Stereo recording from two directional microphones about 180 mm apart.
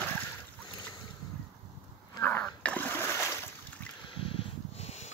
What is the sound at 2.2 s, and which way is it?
Splash, 10° left (ahead or behind).